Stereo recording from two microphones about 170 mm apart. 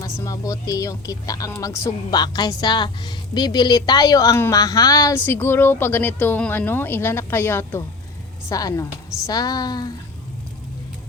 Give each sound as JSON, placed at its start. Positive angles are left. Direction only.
{"t": 0.0, "sound": "speech", "side_deg": 20}